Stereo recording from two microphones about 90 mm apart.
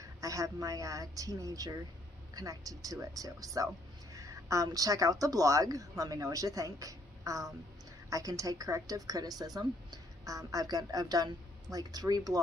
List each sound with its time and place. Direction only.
0.0 s a woman's voice: 40° right (ahead or behind)